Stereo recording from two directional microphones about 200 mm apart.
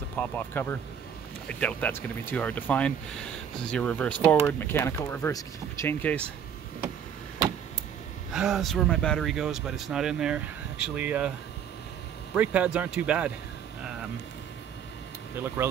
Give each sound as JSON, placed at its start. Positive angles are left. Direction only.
{"t": 0.1, "sound": "speech", "side_deg": 10}
{"t": 8.3, "sound": "speech", "side_deg": 0}
{"t": 12.4, "sound": "speech", "side_deg": -5}
{"t": 15.3, "sound": "speech", "side_deg": -10}